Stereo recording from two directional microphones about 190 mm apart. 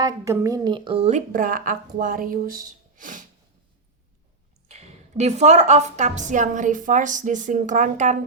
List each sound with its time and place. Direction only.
0.0 s speech: 15° right (ahead or behind); by 3.2 s 45° right (ahead or behind)
4.7 s a woman's voice: 35° right (ahead or behind)